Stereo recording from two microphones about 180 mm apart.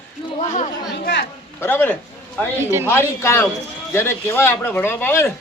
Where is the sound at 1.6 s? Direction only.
10° left (ahead or behind).